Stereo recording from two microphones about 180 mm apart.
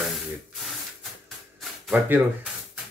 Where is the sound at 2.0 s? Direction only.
10° right (ahead or behind).